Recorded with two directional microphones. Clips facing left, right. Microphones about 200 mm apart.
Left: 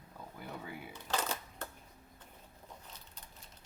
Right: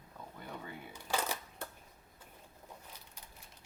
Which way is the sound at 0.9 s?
10° right (ahead or behind).